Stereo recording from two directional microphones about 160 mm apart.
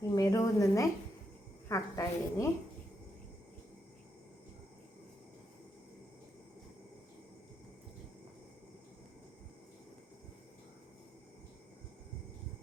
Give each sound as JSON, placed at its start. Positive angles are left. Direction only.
{"t": 0.1, "sound": "a woman's voice", "side_deg": 20}